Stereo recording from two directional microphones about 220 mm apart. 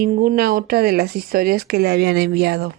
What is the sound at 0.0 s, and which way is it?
Speech, 40° right (ahead or behind).